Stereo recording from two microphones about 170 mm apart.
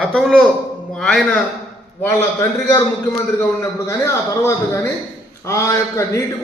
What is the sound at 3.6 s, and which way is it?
A man's voice, 15° left (ahead or behind).